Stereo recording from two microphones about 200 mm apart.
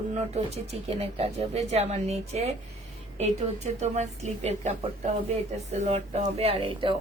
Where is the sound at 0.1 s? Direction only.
30° right (ahead or behind).